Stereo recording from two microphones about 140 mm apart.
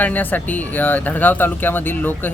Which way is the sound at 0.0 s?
10° left (ahead or behind).